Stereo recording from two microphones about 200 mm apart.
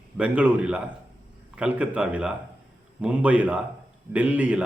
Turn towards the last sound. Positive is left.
turn(degrees=-5)  # may be behind; listen again after turning